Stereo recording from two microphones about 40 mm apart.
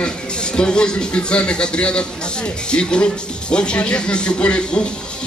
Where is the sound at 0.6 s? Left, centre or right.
Left.